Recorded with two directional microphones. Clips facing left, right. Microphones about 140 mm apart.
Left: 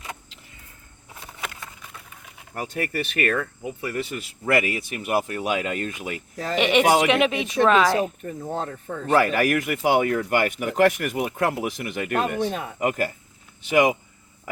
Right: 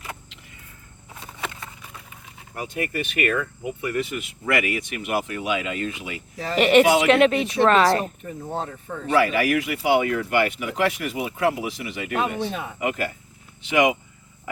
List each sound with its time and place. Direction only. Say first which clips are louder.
2.9 s speech: even; 40° left (ahead or behind)
6.6 s speech: right 3 dB; centre (ahead or behind)
8.2 s speech: left 1 dB; 45° left (ahead or behind)